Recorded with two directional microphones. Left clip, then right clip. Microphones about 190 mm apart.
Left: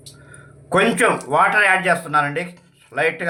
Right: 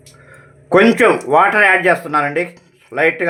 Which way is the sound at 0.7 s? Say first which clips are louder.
Right 6 dB; 40° right (ahead or behind).